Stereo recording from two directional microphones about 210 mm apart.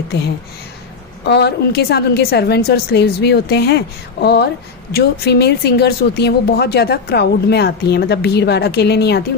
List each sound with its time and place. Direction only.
0.1 s speech: 50° left (ahead or behind)